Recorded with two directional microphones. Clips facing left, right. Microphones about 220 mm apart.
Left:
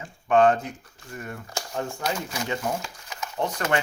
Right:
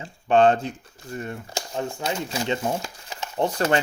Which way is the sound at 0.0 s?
30° right (ahead or behind).